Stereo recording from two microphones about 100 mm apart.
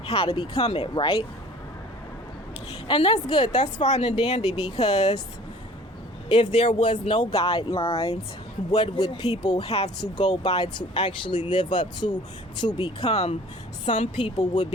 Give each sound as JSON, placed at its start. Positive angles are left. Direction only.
{"t": 0.0, "sound": "speech", "side_deg": 70}
{"t": 0.9, "sound": "speech", "side_deg": 55}
{"t": 2.8, "sound": "speech", "side_deg": 55}
{"t": 3.8, "sound": "a woman's voice", "side_deg": 80}
{"t": 6.3, "sound": "speech", "side_deg": 60}
{"t": 7.3, "sound": "speech", "side_deg": 75}
{"t": 8.7, "sound": "speech", "side_deg": 45}
{"t": 9.6, "sound": "speech", "side_deg": 75}
{"t": 10.2, "sound": "speech", "side_deg": 50}
{"t": 13.8, "sound": "speech", "side_deg": 60}